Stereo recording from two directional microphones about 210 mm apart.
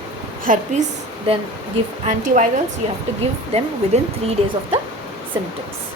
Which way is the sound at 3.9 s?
30° right (ahead or behind).